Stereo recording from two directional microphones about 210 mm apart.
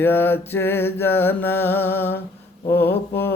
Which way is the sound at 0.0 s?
10° left (ahead or behind).